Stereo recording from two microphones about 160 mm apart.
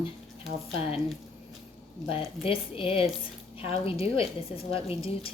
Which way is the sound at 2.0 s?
35° left (ahead or behind).